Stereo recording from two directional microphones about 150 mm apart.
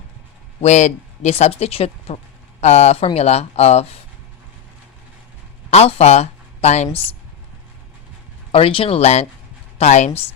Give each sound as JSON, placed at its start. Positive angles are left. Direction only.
{"t": 0.6, "sound": "speech", "side_deg": 50}
{"t": 5.7, "sound": "speech", "side_deg": 45}
{"t": 8.5, "sound": "speech", "side_deg": 40}